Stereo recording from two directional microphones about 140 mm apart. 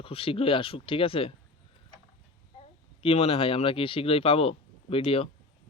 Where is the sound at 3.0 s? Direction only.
45° left (ahead or behind).